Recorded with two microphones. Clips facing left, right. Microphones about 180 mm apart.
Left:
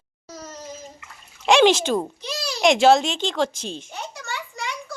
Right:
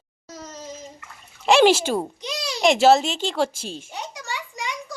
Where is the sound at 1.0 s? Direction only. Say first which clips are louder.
Left 1 dB; 5° right (ahead or behind); by 2.6 s 20° right (ahead or behind).